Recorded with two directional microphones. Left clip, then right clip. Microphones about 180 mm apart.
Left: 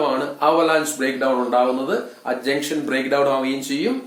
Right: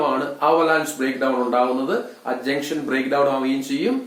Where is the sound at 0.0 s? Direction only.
25° left (ahead or behind).